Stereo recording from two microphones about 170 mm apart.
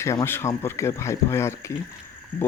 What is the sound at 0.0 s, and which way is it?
A man's voice, 15° left (ahead or behind).